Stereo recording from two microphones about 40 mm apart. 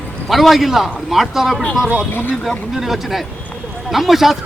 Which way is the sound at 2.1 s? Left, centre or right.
Left.